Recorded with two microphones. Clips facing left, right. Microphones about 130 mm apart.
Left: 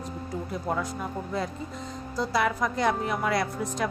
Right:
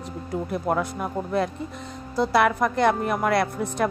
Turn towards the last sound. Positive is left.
turn(degrees=-60)  # may be behind; listen again after turning